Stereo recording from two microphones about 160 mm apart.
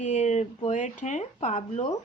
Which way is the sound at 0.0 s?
45° left (ahead or behind).